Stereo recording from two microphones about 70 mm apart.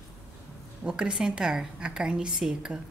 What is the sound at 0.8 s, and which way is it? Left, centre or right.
Speech, centre.